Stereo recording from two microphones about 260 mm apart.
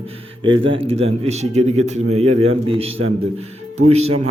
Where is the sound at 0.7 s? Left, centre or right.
Right.